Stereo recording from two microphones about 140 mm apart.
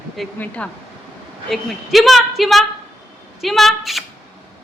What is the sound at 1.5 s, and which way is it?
A woman's voice, centre (ahead or behind).